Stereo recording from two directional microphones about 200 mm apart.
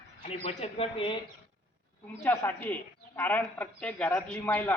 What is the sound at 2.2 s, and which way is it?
A woman's voice, 10° left (ahead or behind).